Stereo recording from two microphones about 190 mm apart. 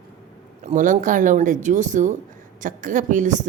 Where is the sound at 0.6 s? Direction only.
40° right (ahead or behind).